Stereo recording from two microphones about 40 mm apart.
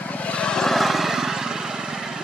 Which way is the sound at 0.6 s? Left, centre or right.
Centre.